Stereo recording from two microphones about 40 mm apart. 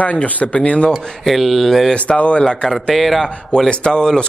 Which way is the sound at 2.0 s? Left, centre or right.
Left.